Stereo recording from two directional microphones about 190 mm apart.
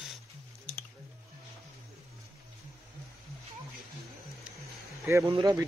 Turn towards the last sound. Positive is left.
turn(degrees=-20)  # may be behind; listen again after turning